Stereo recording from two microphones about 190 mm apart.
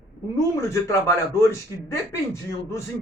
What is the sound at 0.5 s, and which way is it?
Speech, 15° left (ahead or behind).